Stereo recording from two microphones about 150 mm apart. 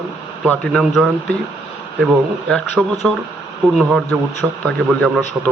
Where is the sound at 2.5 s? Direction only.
5° left (ahead or behind).